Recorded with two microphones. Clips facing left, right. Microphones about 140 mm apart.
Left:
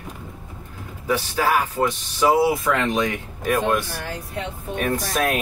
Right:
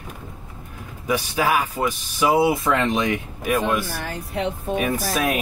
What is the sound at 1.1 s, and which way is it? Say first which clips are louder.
Speech: even; 15° right (ahead or behind).